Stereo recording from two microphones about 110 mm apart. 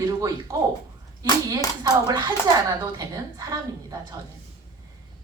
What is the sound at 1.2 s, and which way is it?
Speech, 35° right (ahead or behind).